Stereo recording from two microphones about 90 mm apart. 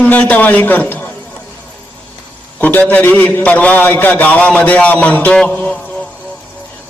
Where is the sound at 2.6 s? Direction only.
20° left (ahead or behind).